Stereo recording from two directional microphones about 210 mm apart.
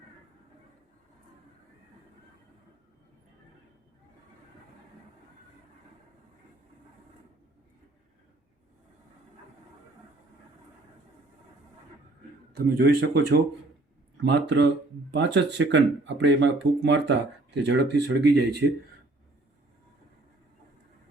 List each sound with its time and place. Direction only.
12.5 s speech: 50° right (ahead or behind)